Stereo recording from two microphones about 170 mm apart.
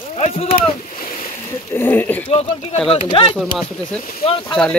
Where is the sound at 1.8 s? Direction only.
10° left (ahead or behind).